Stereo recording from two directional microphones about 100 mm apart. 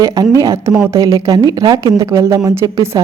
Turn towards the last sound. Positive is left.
turn(degrees=-30)  # may be behind; listen again after turning